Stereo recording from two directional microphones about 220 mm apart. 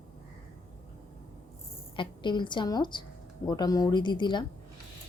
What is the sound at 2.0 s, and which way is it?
A woman's voice, 20° left (ahead or behind).